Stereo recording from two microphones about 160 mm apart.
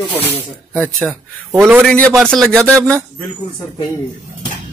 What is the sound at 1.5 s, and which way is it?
Speech, 10° right (ahead or behind).